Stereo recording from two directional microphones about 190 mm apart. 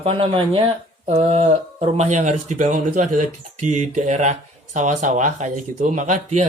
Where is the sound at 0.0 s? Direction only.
30° right (ahead or behind).